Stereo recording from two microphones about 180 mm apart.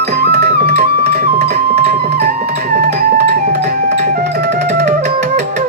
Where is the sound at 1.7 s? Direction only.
60° right (ahead or behind).